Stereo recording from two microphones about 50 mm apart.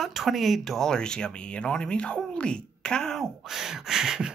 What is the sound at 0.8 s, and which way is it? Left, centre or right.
Speech, centre.